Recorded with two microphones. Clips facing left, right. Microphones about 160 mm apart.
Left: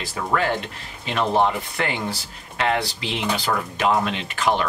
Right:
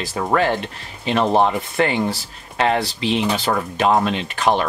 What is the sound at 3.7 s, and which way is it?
Speech, 30° right (ahead or behind).